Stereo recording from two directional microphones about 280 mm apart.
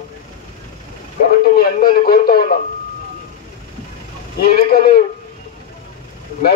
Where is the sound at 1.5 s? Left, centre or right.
Left.